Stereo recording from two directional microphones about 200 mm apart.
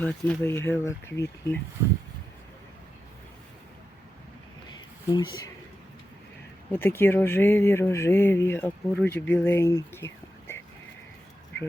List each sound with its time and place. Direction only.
0.0 s speech: 5° left (ahead or behind)
5.1 s speech: 25° left (ahead or behind)
6.7 s speech: 10° left (ahead or behind)